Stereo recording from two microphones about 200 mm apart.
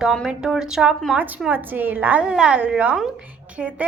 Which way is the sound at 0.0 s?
Centre (ahead or behind).